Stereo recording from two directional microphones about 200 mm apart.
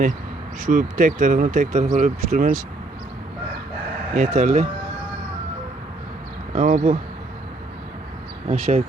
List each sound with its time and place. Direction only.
0.6 s speech: 40° right (ahead or behind)
4.1 s speech: 40° right (ahead or behind)
6.5 s speech: 35° right (ahead or behind)
8.4 s speech: 30° right (ahead or behind)